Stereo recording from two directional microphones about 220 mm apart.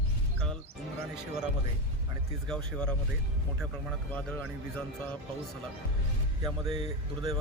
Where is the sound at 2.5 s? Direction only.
5° left (ahead or behind).